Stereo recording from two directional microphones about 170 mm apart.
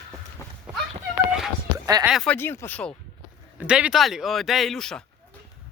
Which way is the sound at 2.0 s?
Centre (ahead or behind).